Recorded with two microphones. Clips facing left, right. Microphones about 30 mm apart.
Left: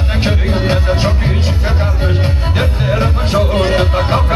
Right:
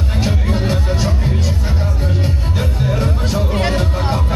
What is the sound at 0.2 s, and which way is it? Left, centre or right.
Music, left.